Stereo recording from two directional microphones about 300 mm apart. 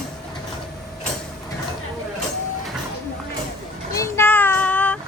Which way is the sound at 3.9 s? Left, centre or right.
Centre.